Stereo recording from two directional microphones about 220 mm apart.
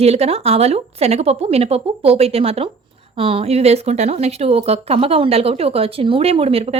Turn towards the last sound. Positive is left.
turn(degrees=-25)  # may be behind; listen again after turning